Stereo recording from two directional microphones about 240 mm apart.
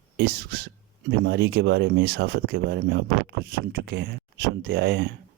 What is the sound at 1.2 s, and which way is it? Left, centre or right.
Speech, right.